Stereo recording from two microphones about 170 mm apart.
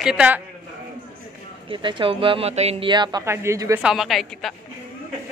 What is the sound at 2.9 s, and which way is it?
Speech, 25° right (ahead or behind).